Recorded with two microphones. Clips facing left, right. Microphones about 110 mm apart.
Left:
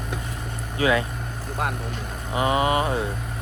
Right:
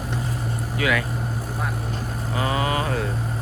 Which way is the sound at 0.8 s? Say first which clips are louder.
Left 2 dB; 30° left (ahead or behind).